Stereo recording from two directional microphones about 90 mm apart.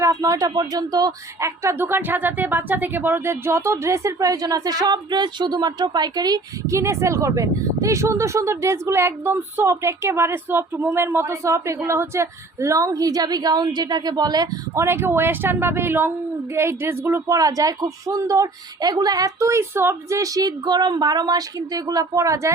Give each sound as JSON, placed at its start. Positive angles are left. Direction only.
{"t": 0.0, "sound": "a woman's voice", "side_deg": -40}
{"t": 1.4, "sound": "speech", "side_deg": -30}
{"t": 6.7, "sound": "a woman's voice", "side_deg": -35}
{"t": 14.8, "sound": "speech", "side_deg": -25}